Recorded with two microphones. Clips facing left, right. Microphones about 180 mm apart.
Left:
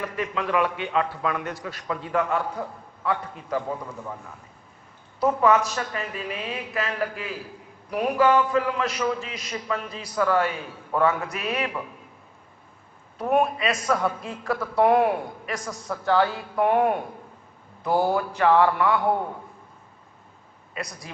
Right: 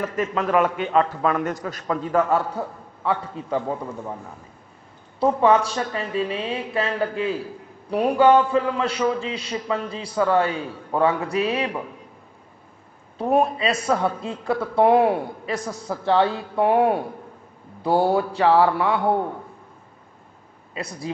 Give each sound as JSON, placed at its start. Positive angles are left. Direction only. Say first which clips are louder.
{"t": 0.1, "sound": "a man's voice", "louder": "right 4 dB", "side_deg": -40}
{"t": 5.2, "sound": "a man's voice", "louder": "right 2 dB", "side_deg": -30}
{"t": 13.2, "sound": "a man's voice", "louder": "right 2 dB", "side_deg": -30}
{"t": 20.7, "sound": "a man's voice", "louder": "right 4 dB", "side_deg": -30}